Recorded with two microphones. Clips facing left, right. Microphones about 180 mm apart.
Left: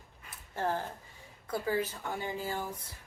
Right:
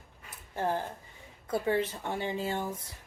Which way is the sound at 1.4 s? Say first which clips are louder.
Right 3 dB; 25° right (ahead or behind).